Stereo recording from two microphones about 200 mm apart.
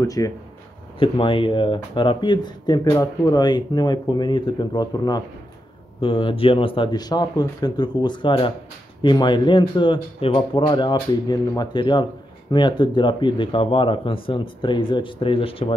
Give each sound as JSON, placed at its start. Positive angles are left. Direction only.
{"t": 0.0, "sound": "speech", "side_deg": 15}